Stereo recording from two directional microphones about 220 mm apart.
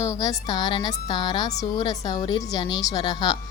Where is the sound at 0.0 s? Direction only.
15° left (ahead or behind).